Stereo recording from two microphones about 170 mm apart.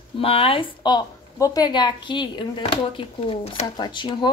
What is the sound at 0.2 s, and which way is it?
A woman's voice, 35° left (ahead or behind).